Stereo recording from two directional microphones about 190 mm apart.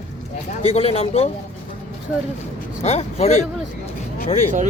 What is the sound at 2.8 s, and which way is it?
Speech, 35° left (ahead or behind).